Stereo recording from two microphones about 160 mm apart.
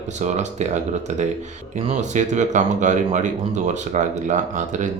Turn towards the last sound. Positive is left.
turn(degrees=-50)  # may be behind; listen again after turning